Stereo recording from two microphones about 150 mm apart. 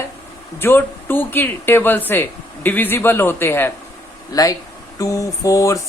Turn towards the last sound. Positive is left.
turn(degrees=20)  # may be behind; listen again after turning